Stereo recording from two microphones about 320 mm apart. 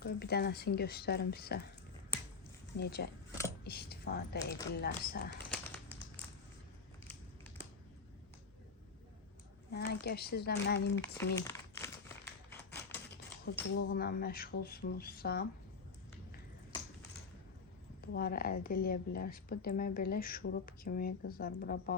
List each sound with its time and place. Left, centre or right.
0.0 s a woman's voice: left
2.7 s speech: left
9.7 s speech: left
11.0 s typewriter: centre
13.4 s a woman's voice: left
18.0 s a woman's voice: left